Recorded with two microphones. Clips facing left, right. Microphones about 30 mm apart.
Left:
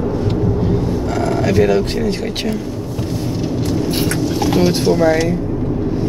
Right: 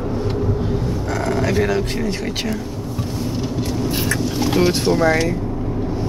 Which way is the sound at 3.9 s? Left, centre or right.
Left.